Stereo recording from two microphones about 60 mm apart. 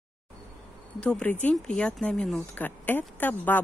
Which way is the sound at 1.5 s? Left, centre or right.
Centre.